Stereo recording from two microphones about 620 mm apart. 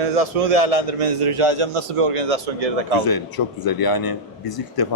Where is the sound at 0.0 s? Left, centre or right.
Right.